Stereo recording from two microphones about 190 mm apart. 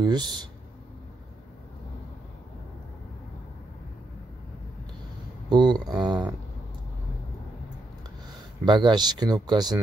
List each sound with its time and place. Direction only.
0.0 s speech: 20° right (ahead or behind)
5.5 s speech: 25° right (ahead or behind)
8.6 s speech: 25° right (ahead or behind)